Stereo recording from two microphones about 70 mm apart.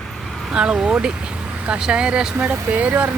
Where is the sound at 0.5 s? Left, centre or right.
Centre.